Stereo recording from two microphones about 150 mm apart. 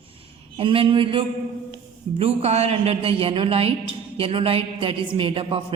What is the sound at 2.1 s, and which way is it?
A woman's voice, 45° right (ahead or behind).